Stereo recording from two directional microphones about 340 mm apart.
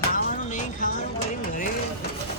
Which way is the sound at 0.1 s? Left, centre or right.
Left.